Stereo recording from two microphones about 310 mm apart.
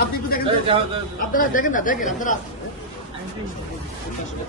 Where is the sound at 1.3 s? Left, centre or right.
Left.